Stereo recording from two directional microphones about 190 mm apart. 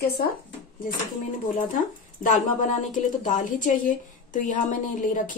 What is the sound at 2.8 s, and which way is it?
Speech, 40° left (ahead or behind).